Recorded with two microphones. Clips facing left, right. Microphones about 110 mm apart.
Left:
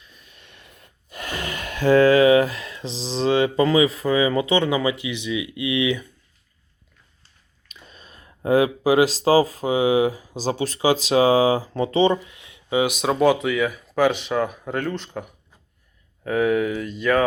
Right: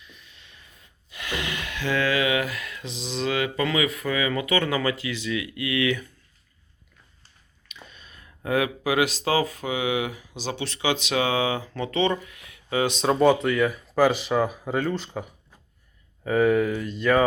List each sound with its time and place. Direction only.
0.3 s a sound: 60° left (ahead or behind)
1.1 s speech: 45° left (ahead or behind); by 6.1 s 15° left (ahead or behind)
7.7 s speech: 35° left (ahead or behind)
12.8 s speech: 10° left (ahead or behind)